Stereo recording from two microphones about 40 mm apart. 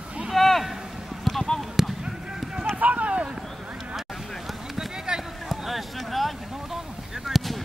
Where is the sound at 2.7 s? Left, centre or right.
Right.